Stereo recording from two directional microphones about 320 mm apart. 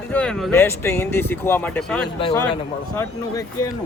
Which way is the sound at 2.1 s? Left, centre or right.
Centre.